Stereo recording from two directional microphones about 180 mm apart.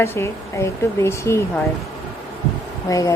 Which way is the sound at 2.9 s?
20° left (ahead or behind).